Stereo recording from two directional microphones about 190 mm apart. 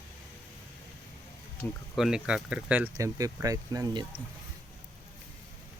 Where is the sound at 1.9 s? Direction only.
5° right (ahead or behind); by 4.2 s 25° right (ahead or behind).